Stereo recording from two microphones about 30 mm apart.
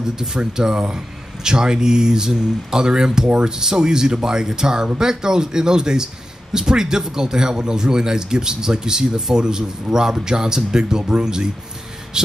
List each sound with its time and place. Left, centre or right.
0.0 s a man's voice: centre